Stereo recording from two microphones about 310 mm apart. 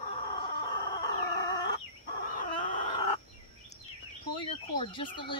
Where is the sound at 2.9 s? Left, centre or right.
Centre.